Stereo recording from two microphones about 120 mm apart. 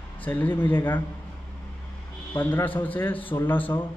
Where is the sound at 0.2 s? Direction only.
15° left (ahead or behind).